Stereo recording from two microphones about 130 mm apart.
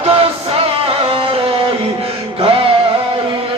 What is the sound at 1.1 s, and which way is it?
Music, 45° right (ahead or behind).